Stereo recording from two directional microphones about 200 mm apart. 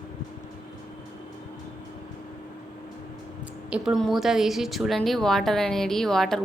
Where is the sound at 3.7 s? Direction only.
Centre (ahead or behind).